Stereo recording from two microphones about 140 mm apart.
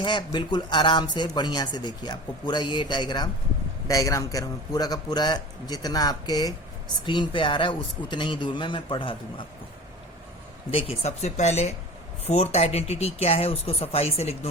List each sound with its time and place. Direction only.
0.0 s speech: 35° left (ahead or behind)
10.7 s speech: 45° left (ahead or behind)